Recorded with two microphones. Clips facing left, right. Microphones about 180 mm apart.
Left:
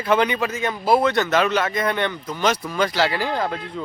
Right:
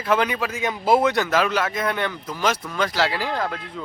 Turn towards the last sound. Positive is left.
turn(degrees=0)  # may be behind; listen again after turning